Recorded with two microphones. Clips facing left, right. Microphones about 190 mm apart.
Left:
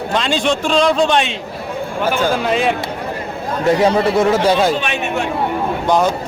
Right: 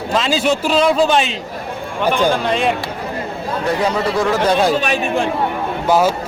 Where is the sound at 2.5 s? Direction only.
Centre (ahead or behind).